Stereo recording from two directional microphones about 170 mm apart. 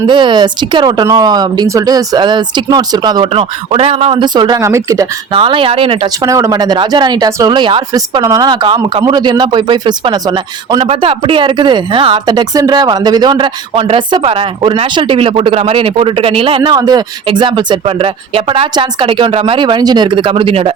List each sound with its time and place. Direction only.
0.1 s speech: 30° right (ahead or behind)
5.3 s speech: 30° right (ahead or behind)
6.2 s speech: 20° right (ahead or behind); by 20.7 s 35° right (ahead or behind)